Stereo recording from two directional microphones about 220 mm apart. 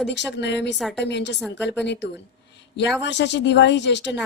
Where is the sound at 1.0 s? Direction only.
50° left (ahead or behind).